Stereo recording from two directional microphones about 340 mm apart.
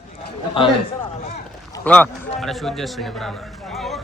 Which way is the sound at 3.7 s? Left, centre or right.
Centre.